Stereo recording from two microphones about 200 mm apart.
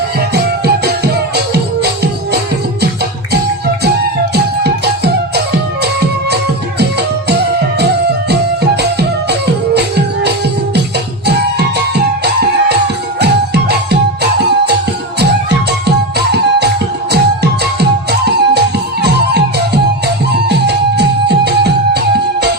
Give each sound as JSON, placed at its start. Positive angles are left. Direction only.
{"t": 0.6, "sound": "music", "side_deg": -55}
{"t": 4.6, "sound": "music", "side_deg": -55}
{"t": 8.3, "sound": "music", "side_deg": -55}
{"t": 11.9, "sound": "music", "side_deg": -55}
{"t": 16.1, "sound": "music", "side_deg": -55}